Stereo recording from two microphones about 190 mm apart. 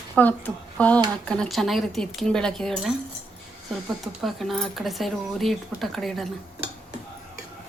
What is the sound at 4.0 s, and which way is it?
Speech, centre (ahead or behind).